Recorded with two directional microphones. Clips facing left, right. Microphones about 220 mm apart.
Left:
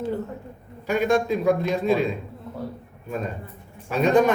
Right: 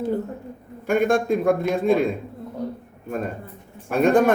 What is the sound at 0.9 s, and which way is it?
A man's voice, 55° right (ahead or behind).